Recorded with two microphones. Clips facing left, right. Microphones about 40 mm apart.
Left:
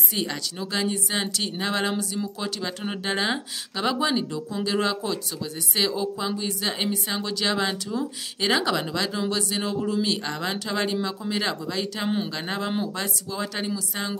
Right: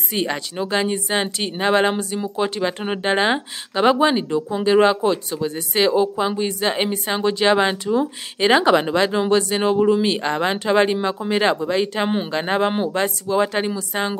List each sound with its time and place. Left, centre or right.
0.1 s speech: right